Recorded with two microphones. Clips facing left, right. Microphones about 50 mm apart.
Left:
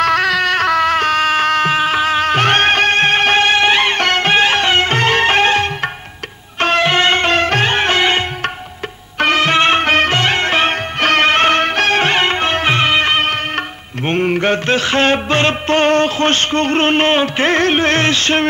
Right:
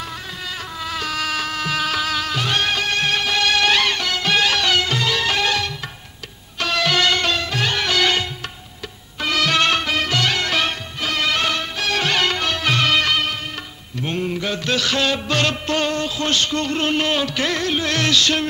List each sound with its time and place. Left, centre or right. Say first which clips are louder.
0.0 s a sound: left 17 dB; left
4.0 s music: left 6 dB; left
7.3 s music: left 8 dB; left
9.2 s music: left 6 dB; left
9.8 s music: left 7 dB; left
11.0 s music: left 9 dB; left
11.9 s music of bollywood: left 6 dB; left
14.0 s mantra: left 9 dB; left
14.8 s music: left 6 dB; left